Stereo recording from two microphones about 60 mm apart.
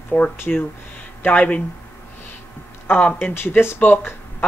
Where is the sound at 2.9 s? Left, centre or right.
Left.